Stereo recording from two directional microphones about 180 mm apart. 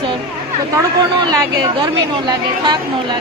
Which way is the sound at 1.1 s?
25° right (ahead or behind).